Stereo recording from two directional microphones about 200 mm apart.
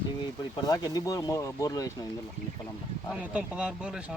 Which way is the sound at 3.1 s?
5° right (ahead or behind).